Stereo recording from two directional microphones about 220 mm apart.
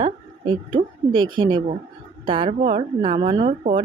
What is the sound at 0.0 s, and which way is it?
A woman's voice, 25° right (ahead or behind).